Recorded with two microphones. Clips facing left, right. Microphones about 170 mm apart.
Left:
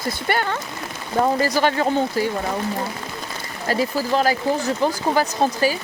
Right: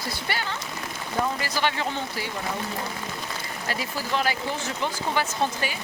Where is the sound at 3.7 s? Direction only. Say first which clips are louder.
Left 9 dB; 40° left (ahead or behind).